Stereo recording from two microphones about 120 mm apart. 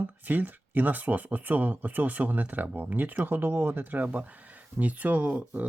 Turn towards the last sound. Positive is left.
turn(degrees=-10)  # may be behind; listen again after turning